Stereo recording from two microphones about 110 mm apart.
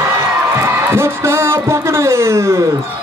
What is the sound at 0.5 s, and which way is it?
Heart sounds, 25° right (ahead or behind).